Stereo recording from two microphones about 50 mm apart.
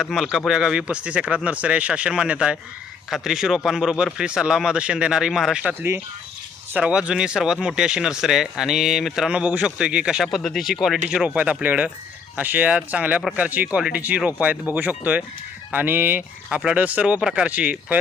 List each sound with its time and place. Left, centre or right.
0.0 s a man's voice: centre
3.1 s a man's voice: centre
6.7 s a man's voice: centre
9.6 s speech: centre
10.4 s speech: centre
11.3 s speech: right
17.2 s speech: centre